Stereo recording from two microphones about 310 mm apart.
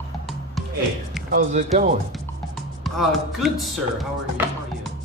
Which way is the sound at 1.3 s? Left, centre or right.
Right.